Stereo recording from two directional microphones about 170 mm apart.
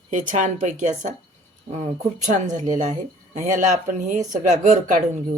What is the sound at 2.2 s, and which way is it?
Speech, 45° right (ahead or behind).